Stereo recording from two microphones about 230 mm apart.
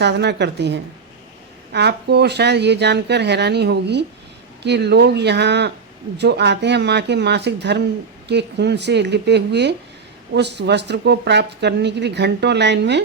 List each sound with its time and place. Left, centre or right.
0.0 s speech: right